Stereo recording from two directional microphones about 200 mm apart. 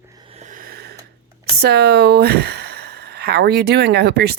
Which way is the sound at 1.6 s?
55° right (ahead or behind).